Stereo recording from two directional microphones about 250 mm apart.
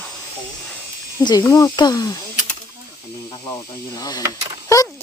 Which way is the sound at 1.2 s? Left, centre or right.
Centre.